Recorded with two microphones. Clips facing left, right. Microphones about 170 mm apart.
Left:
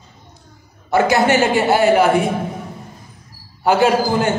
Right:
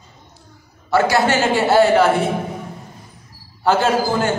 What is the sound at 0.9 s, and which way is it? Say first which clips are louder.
A man's voice: left 1 dB; 20° left (ahead or behind).